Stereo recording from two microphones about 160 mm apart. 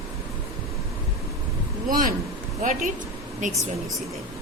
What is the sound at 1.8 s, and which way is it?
Speech, 60° right (ahead or behind).